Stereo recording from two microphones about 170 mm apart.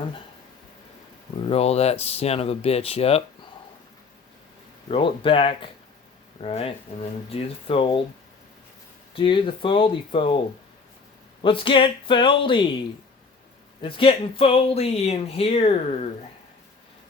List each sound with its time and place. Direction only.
1.5 s speech: 35° left (ahead or behind)
4.9 s speech: 30° left (ahead or behind)
9.1 s speech: 30° left (ahead or behind)
11.4 s speech: 30° left (ahead or behind)
13.8 s speech: 30° left (ahead or behind)